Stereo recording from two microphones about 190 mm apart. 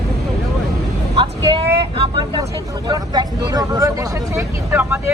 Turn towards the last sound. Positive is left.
turn(degrees=-10)  # may be behind; listen again after turning